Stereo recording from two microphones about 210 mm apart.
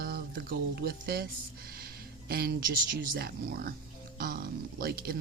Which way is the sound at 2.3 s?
45° right (ahead or behind).